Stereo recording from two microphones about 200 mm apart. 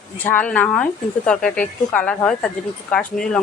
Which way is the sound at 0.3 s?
5° left (ahead or behind).